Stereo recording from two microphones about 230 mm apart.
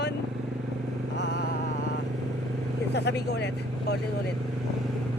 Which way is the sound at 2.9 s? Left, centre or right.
Left.